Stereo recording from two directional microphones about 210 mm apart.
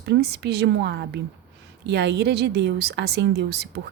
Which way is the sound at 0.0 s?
50° right (ahead or behind).